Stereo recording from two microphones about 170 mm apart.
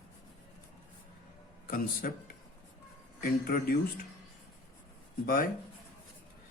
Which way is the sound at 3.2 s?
60° left (ahead or behind).